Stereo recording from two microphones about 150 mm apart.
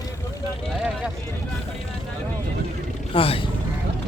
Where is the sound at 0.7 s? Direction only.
5° right (ahead or behind).